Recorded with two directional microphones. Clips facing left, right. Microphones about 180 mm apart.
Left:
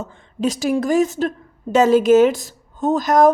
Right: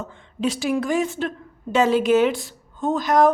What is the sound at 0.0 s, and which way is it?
A woman's voice, 40° left (ahead or behind).